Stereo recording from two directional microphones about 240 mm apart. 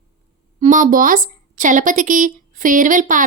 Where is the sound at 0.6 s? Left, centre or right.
Right.